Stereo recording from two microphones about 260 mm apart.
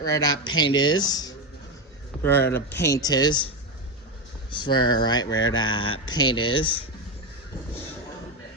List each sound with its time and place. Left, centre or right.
0.0 s speech: centre
4.5 s speech: centre
5.2 s speech: left
5.5 s speech: centre